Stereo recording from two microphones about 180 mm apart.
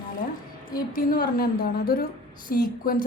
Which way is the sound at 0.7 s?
55° left (ahead or behind).